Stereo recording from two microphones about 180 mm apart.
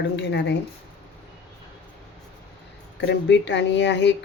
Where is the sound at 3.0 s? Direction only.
75° left (ahead or behind).